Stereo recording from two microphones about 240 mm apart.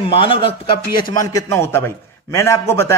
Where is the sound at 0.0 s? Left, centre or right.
Left.